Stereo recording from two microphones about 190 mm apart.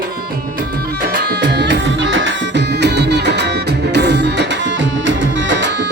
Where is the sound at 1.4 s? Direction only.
65° right (ahead or behind).